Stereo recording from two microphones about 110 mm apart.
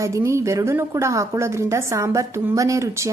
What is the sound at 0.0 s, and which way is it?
A woman's voice, 30° right (ahead or behind).